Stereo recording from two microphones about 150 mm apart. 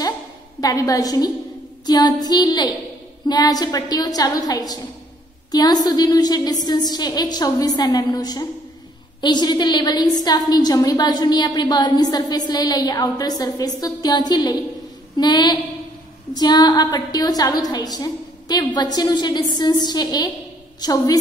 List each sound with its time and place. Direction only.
0.6 s a woman's voice: 25° left (ahead or behind)